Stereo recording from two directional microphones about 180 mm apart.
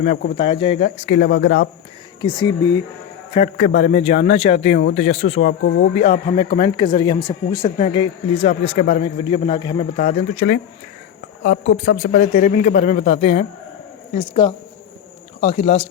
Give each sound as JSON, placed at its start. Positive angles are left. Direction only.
{"t": 0.0, "sound": "speech", "side_deg": 50}
{"t": 0.3, "sound": "a man's voice", "side_deg": 30}
{"t": 0.9, "sound": "speech", "side_deg": 50}
{"t": 2.2, "sound": "a man's voice", "side_deg": 20}
{"t": 3.3, "sound": "a man's voice", "side_deg": 45}
{"t": 5.6, "sound": "speech", "side_deg": 70}
{"t": 5.9, "sound": "a man's voice", "side_deg": 35}
{"t": 7.8, "sound": "a man's voice", "side_deg": 30}
{"t": 9.0, "sound": "a man's voice", "side_deg": 25}
{"t": 10.0, "sound": "a man's voice", "side_deg": 40}
{"t": 11.9, "sound": "a man's voice", "side_deg": 50}